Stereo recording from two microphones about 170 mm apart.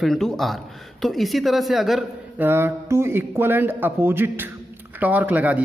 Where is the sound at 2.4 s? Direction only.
15° right (ahead or behind).